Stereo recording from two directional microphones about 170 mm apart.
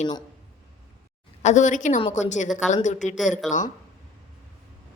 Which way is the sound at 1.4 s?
45° left (ahead or behind).